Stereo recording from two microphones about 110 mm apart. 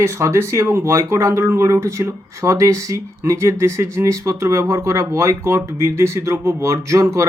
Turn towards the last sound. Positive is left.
turn(degrees=-30)  # may be behind; listen again after turning